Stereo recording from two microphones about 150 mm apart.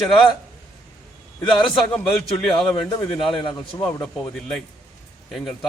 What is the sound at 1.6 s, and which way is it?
A man's voice, centre (ahead or behind).